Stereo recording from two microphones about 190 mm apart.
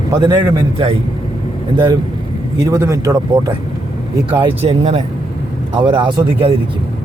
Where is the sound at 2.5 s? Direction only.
15° right (ahead or behind).